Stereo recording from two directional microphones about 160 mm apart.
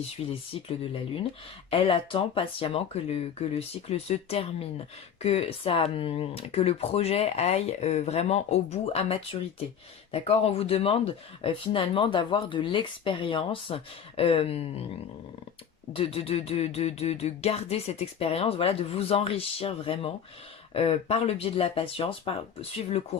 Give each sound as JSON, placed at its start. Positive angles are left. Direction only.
{"t": 0.5, "sound": "speech", "side_deg": 35}
{"t": 1.7, "sound": "speech", "side_deg": 35}
{"t": 15.9, "sound": "speech", "side_deg": 35}